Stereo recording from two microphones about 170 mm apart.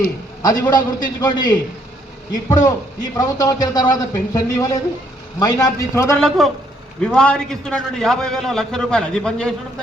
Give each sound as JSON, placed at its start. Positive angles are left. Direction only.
{"t": 0.7, "sound": "a man's voice", "side_deg": 25}
{"t": 6.1, "sound": "a man's voice", "side_deg": 0}